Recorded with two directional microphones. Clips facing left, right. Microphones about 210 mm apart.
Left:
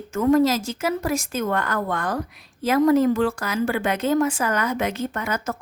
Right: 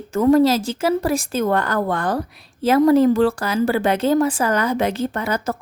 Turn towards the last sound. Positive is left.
turn(degrees=-35)  # may be behind; listen again after turning